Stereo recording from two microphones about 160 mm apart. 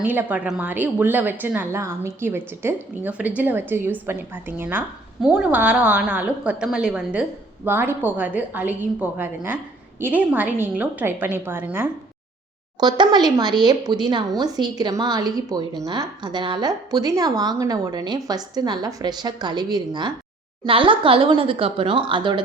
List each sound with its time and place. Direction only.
0.0 s a woman's voice: 10° right (ahead or behind)
12.8 s a woman's voice: 25° right (ahead or behind)